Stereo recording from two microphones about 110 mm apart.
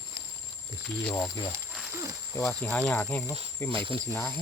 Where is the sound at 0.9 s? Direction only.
20° left (ahead or behind).